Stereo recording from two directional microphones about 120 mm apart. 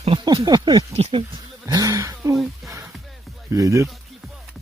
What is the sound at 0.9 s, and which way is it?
Speech, 50° right (ahead or behind).